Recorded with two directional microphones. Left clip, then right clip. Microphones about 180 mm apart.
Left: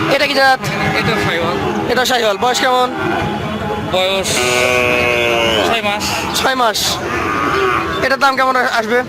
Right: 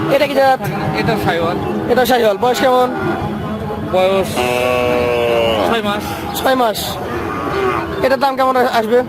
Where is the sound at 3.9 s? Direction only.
35° right (ahead or behind).